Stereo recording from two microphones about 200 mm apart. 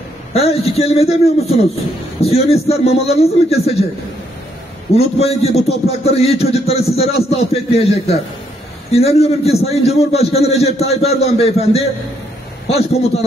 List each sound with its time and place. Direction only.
0.3 s a man's voice: 30° left (ahead or behind)
4.9 s a man's voice: 30° left (ahead or behind)